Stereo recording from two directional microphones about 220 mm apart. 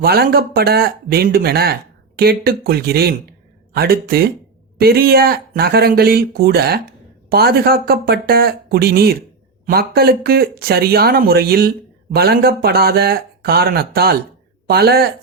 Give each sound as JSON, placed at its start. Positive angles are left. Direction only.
{"t": 0.0, "sound": "speech", "side_deg": -45}